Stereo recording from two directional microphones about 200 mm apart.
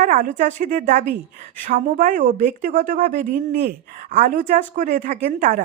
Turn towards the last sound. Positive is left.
turn(degrees=-40)  # may be behind; listen again after turning